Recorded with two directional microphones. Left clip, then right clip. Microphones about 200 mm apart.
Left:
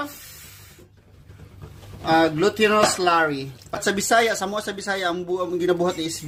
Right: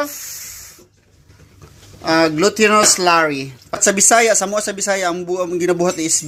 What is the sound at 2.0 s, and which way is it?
Speech, 35° right (ahead or behind).